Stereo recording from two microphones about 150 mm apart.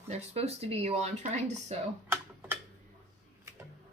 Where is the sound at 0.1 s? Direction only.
45° right (ahead or behind).